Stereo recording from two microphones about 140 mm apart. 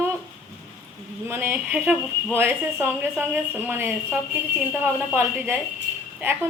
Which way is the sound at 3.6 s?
15° right (ahead or behind).